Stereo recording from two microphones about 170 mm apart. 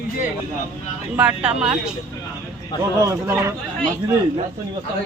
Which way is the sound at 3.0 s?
15° right (ahead or behind).